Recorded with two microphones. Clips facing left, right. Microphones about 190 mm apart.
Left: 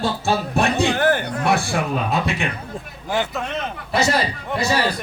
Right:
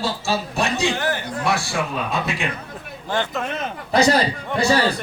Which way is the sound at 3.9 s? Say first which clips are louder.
Right 4 dB; 35° right (ahead or behind).